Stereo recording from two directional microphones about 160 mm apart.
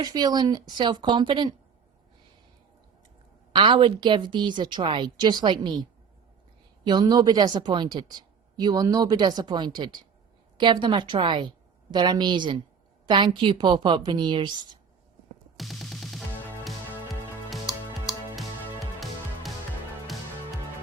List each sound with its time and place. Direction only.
0.0 s a woman's voice: 25° right (ahead or behind)
3.5 s a woman's voice: 30° right (ahead or behind)
6.8 s a woman's voice: 25° right (ahead or behind)
15.5 s music: centre (ahead or behind)